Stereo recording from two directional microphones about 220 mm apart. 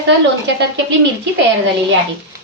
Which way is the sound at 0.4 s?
55° right (ahead or behind).